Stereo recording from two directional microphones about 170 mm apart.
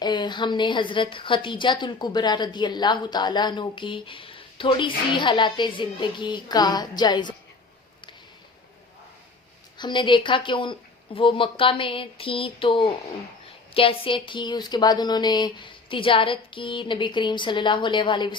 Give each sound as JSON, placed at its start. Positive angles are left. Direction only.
{"t": 0.0, "sound": "a woman's voice", "side_deg": 25}
{"t": 9.7, "sound": "a woman's voice", "side_deg": 25}